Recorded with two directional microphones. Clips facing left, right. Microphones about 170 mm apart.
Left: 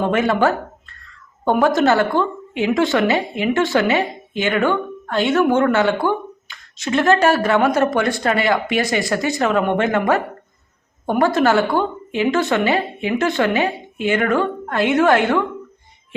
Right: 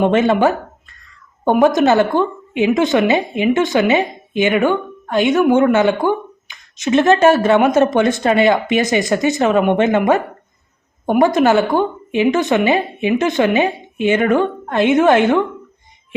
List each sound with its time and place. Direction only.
0.0 s a woman's voice: 25° right (ahead or behind)